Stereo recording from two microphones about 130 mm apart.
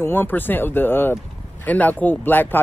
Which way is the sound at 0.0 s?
15° left (ahead or behind).